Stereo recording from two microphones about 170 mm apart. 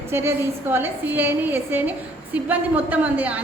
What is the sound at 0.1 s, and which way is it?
A woman's voice, 15° right (ahead or behind).